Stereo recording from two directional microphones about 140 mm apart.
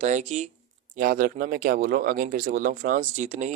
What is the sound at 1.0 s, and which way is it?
Speech, 80° right.